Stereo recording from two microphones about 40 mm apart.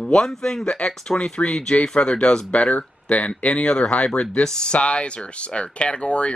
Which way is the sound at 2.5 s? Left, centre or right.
Left.